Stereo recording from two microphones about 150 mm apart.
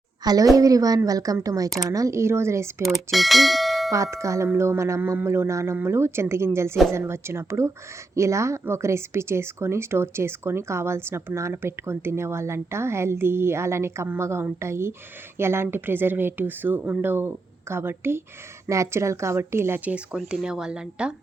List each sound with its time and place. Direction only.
0.5 s a woman's voice: 25° right (ahead or behind)
2.8 s speech: centre (ahead or behind)
3.9 s speech: 20° right (ahead or behind)